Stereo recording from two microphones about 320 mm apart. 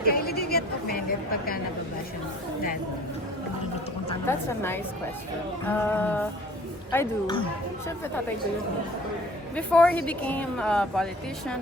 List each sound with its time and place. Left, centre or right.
0.0 s a sound: left
4.1 s a woman's voice: centre
9.6 s speech: centre